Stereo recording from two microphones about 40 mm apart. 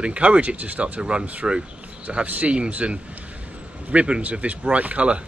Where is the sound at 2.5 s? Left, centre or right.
Right.